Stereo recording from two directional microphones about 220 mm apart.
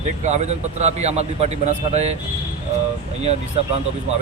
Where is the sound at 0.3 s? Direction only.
30° right (ahead or behind).